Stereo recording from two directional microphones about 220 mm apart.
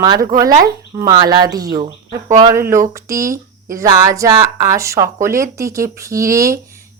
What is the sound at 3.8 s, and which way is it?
Speech, 15° right (ahead or behind).